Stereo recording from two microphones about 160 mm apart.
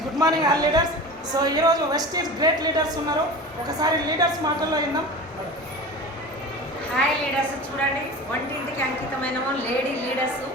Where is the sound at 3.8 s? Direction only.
25° right (ahead or behind).